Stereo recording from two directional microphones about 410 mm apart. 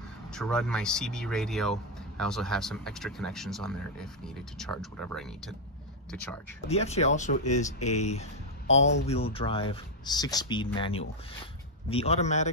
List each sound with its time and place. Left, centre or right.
0.3 s speech: centre
6.7 s speech: centre